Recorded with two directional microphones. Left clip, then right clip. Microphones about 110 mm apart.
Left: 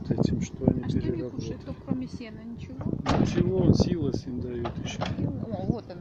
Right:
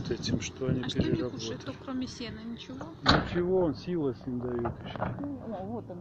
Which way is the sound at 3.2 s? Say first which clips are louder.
Left 2 dB; 55° left (ahead or behind).